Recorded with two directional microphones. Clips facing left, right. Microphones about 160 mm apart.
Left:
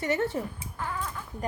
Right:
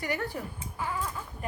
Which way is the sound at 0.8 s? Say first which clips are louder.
Right 1 dB; 10° right (ahead or behind).